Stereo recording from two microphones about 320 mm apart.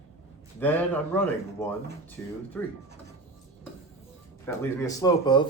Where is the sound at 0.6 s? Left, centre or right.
Centre.